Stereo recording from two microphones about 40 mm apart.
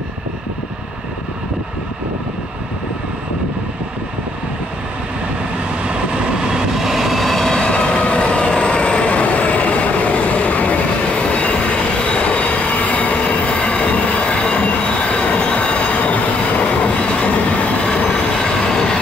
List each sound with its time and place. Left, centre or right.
5.9 s train: right; by 7.5 s centre
7.5 s vehicle: centre; by 14.2 s left
14.3 s train: left
18.0 s train: centre